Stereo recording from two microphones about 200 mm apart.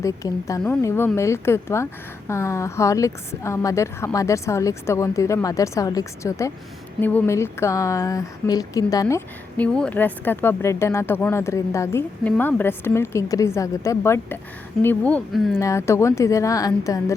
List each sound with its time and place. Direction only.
0.0 s a woman's voice: 15° left (ahead or behind)